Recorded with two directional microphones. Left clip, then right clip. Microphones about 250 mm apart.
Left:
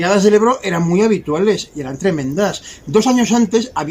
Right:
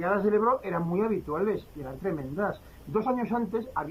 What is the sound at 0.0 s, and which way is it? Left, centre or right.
Speech, left.